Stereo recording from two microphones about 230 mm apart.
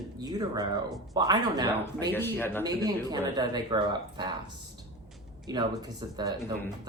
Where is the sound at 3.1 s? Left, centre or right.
Centre.